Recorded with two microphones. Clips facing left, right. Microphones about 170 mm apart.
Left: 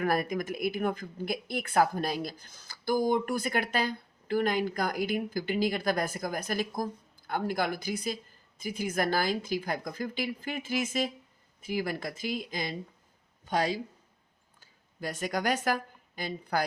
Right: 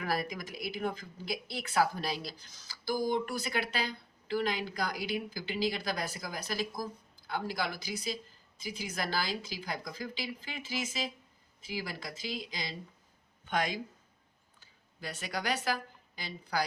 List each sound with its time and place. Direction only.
0.0 s speech: 50° left (ahead or behind)
13.4 s speech: 35° left (ahead or behind)
14.6 s speech: 45° left (ahead or behind)